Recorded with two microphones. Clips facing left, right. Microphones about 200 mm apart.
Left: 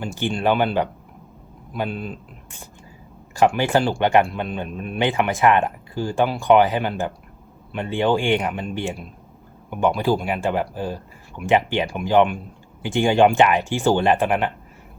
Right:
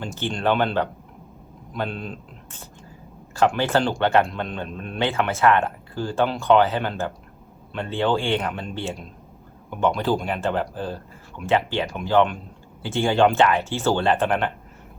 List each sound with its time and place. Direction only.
0.0 s speech: 10° left (ahead or behind)